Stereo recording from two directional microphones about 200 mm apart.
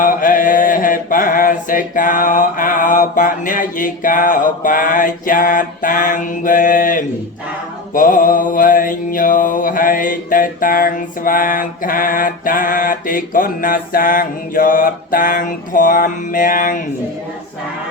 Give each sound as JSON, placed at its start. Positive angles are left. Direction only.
{"t": 0.0, "sound": "mantra", "side_deg": 40}